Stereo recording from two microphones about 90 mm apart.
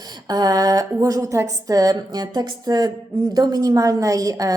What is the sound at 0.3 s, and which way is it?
A woman's voice, 45° right (ahead or behind).